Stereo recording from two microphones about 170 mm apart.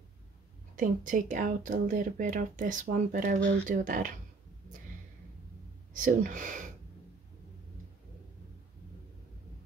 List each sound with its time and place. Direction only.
0.7 s speech: 50° right (ahead or behind)
5.9 s speech: 50° right (ahead or behind)